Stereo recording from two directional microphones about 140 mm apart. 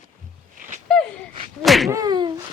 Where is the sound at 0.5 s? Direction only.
75° right (ahead or behind).